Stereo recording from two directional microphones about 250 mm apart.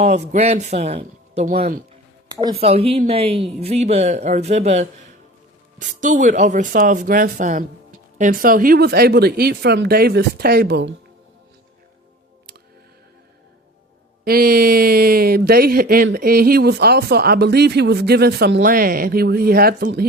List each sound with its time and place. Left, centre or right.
0.0 s speech: right
2.3 s speech: centre; by 10.9 s right
14.3 s speech: right